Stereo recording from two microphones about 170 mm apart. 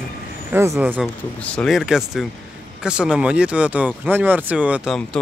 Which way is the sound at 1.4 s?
5° left (ahead or behind).